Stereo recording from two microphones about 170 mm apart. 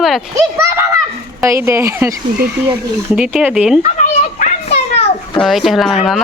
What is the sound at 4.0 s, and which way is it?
Children playing, 40° left (ahead or behind).